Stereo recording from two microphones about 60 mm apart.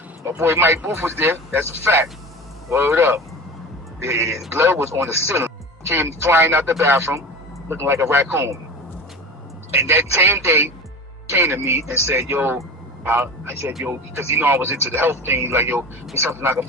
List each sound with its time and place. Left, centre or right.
0.2 s speech: right
9.7 s speech: right
13.8 s speech: right